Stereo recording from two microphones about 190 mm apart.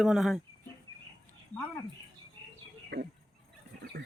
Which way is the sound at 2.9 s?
55° right (ahead or behind).